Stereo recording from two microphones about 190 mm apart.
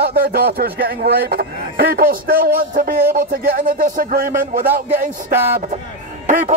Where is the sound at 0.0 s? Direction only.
50° right (ahead or behind).